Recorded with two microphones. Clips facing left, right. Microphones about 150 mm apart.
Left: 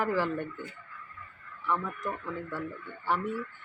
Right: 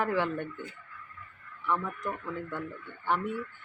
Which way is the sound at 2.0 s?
5° left (ahead or behind).